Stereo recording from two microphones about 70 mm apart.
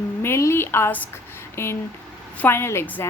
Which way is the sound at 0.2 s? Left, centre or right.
Left.